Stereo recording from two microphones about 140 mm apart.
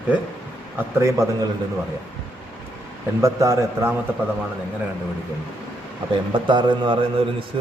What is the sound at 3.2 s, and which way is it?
Speech, 20° right (ahead or behind).